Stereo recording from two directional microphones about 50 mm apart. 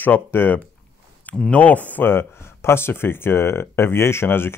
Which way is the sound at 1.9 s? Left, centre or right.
Left.